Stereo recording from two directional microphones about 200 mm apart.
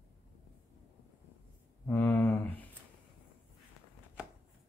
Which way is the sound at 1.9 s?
10° left (ahead or behind).